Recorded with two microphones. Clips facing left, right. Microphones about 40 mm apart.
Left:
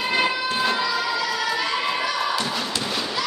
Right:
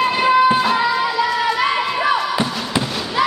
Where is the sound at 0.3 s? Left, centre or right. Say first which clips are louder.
Right 10 dB; right.